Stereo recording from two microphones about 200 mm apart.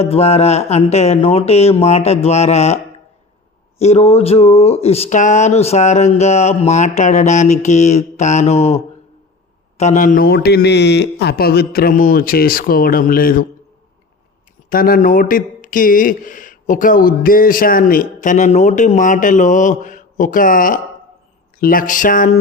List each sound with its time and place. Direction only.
0.0 s speech: 30° left (ahead or behind)
3.8 s speech: 30° left (ahead or behind)
14.7 s speech: 45° left (ahead or behind)